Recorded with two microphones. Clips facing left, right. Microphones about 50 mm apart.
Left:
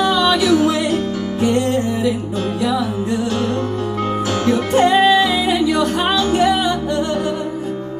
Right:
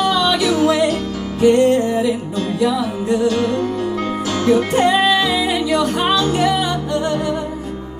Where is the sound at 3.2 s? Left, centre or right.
Left.